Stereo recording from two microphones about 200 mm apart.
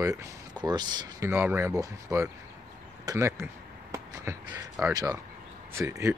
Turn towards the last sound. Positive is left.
turn(degrees=-15)  # may be behind; listen again after turning